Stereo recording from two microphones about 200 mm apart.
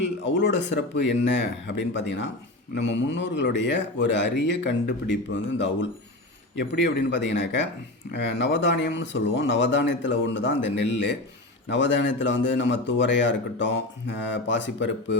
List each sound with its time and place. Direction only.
0.0 s speech: 65° left (ahead or behind)